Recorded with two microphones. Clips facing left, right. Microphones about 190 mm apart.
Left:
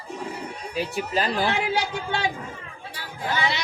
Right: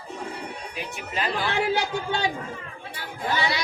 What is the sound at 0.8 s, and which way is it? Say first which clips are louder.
Speech: left 6 dB; 40° left (ahead or behind).